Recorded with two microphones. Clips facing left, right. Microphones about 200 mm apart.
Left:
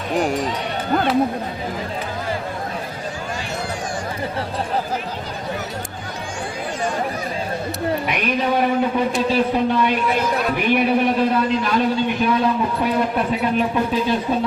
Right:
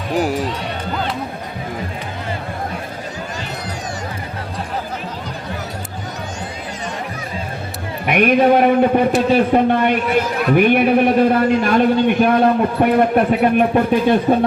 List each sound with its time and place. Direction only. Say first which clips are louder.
0.1 s speech: right 2 dB; 5° right (ahead or behind)
8.0 s a man's voice: right 8 dB; 55° right (ahead or behind)